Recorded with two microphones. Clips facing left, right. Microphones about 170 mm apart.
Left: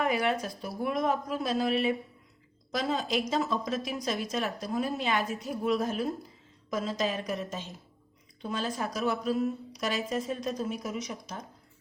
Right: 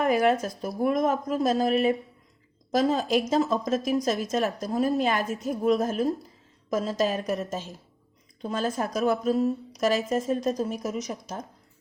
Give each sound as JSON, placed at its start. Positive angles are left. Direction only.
{"t": 0.0, "sound": "a woman's voice", "side_deg": -45}